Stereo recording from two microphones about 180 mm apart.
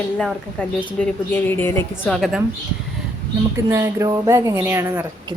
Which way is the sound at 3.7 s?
15° right (ahead or behind).